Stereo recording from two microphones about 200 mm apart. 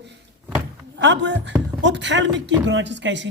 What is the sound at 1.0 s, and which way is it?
A man's voice, 60° right (ahead or behind).